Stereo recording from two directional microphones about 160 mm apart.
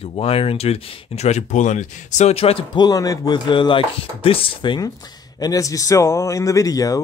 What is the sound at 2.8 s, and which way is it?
Speech, 20° left (ahead or behind).